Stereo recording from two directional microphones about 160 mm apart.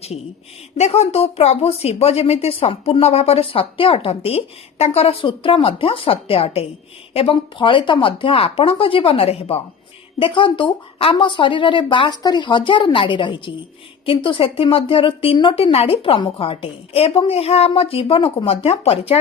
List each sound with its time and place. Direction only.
0.8 s speech: 40° left (ahead or behind)